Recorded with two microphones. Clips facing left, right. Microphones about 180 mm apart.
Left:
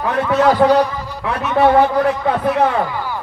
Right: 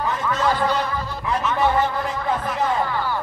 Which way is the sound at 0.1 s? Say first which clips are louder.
Left 10 dB; 70° left (ahead or behind).